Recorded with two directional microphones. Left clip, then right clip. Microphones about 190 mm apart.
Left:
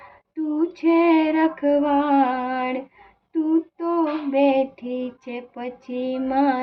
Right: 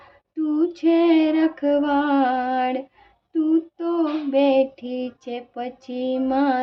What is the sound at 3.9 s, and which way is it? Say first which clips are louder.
Female singing: even; 15° right (ahead or behind).